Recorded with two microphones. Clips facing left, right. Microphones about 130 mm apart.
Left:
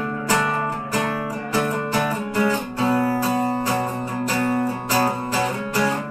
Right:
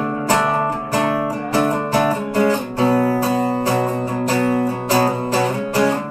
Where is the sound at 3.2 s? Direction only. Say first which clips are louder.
Right 3 dB; 35° right (ahead or behind).